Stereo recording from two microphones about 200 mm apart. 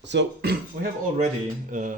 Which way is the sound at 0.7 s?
45° right (ahead or behind).